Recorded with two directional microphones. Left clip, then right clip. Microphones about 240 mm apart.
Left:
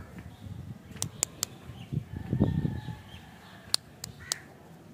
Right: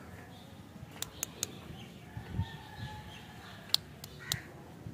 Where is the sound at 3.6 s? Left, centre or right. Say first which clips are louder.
Left 1 dB; centre.